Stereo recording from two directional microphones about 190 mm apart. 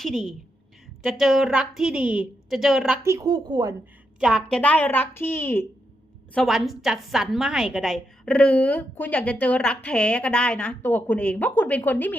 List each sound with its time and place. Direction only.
0.0 s a woman's voice: centre (ahead or behind)
3.0 s a woman's voice: 15° right (ahead or behind)
4.2 s a woman's voice: centre (ahead or behind)
6.3 s a woman's voice: centre (ahead or behind)